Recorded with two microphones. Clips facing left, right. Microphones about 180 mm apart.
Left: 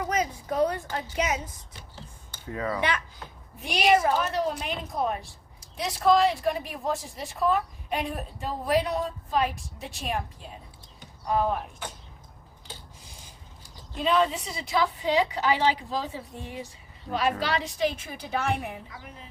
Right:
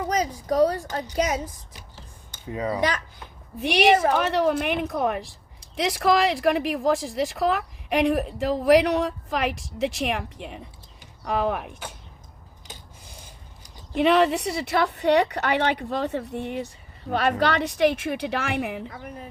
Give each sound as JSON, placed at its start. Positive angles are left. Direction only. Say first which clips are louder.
{"t": 0.1, "sound": "a woman's voice", "louder": "right 6 dB", "side_deg": -35}
{"t": 2.3, "sound": "speech", "louder": "right 3 dB", "side_deg": -20}
{"t": 3.6, "sound": "a woman's voice", "louder": "right 4 dB", "side_deg": -70}
{"t": 13.9, "sound": "a woman's voice", "louder": "right 5 dB", "side_deg": -75}
{"t": 18.9, "sound": "a woman's voice", "louder": "right 7 dB", "side_deg": -50}